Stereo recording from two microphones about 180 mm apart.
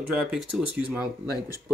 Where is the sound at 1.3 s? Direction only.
20° left (ahead or behind).